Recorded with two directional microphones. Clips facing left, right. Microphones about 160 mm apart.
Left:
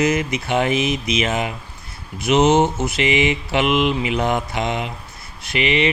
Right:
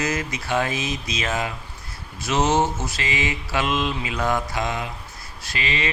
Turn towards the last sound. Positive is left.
turn(degrees=20)  # may be behind; listen again after turning